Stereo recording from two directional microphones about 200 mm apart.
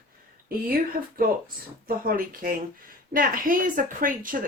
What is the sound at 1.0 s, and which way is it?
Speech, 50° right (ahead or behind).